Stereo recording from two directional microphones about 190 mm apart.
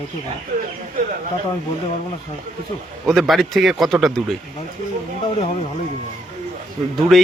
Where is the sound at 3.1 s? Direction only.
Centre (ahead or behind).